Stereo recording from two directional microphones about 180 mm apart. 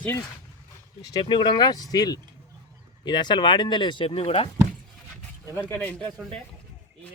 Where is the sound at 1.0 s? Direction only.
25° left (ahead or behind).